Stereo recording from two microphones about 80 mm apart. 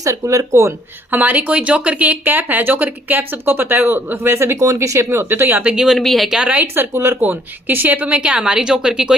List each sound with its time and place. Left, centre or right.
0.0 s speech: right
1.1 s speech: right
5.0 s speech: right
5.6 s a woman's voice: centre
6.0 s a woman's voice: centre
6.9 s a woman's voice: right; by 9.1 s centre